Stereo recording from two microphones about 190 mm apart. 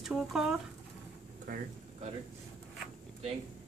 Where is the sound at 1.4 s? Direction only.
45° right (ahead or behind).